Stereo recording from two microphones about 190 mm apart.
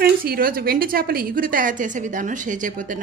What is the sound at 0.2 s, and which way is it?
A woman's voice, 50° right (ahead or behind).